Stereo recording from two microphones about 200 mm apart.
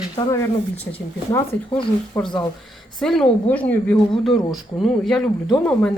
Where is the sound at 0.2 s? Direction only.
20° left (ahead or behind).